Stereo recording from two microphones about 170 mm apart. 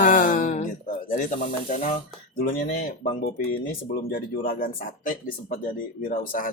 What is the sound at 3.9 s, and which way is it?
Speech, 60° left (ahead or behind).